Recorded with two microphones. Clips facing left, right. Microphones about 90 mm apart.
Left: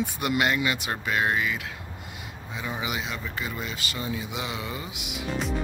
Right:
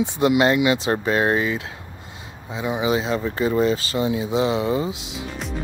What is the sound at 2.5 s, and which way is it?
Speech, 20° right (ahead or behind).